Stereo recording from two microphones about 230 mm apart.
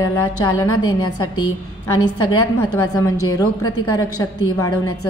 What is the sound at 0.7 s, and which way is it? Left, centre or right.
Speech, centre.